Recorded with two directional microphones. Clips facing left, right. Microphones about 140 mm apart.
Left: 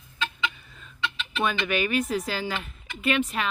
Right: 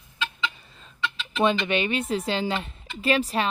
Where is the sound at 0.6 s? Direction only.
30° right (ahead or behind).